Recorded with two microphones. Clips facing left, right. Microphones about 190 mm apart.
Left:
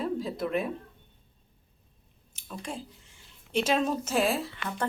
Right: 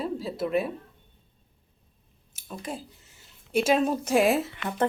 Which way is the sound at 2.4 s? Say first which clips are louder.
Right 2 dB; 10° right (ahead or behind).